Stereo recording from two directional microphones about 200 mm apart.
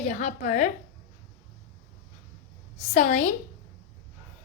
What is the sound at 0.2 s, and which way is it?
Speech, 40° left (ahead or behind).